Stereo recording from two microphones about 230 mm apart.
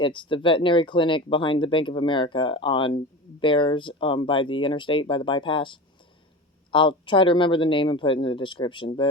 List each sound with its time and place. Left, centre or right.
0.0 s speech: left